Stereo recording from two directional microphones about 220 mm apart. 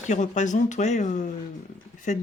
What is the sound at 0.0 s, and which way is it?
Speech, 35° left (ahead or behind).